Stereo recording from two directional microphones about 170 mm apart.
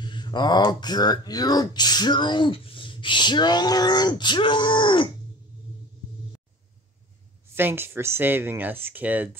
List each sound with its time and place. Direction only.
0.0 s speech: 25° left (ahead or behind)
7.5 s speech: 15° right (ahead or behind)